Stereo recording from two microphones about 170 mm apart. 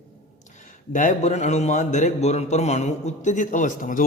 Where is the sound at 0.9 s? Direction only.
45° left (ahead or behind).